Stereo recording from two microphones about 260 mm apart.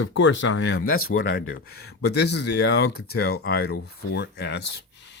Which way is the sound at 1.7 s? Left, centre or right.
Left.